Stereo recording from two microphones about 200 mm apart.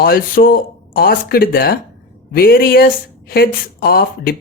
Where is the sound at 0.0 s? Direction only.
45° left (ahead or behind).